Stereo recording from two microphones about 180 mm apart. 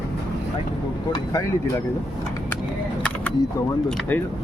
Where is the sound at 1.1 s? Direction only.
20° left (ahead or behind).